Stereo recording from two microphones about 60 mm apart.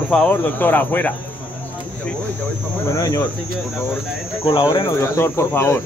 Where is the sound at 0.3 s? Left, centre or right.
Left.